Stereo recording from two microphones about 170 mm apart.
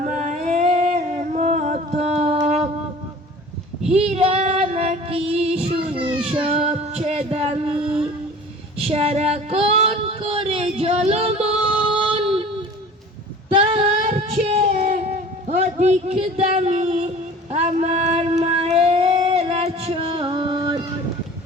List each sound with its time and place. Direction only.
0.0 s humming: 45° right (ahead or behind)
3.8 s female singing: 40° right (ahead or behind)
6.1 s child singing: 5° right (ahead or behind)
6.3 s female singing: 35° right (ahead or behind)
8.8 s a sound: 35° right (ahead or behind)
13.5 s female singing: 35° right (ahead or behind)
14.0 s a sound: 40° right (ahead or behind)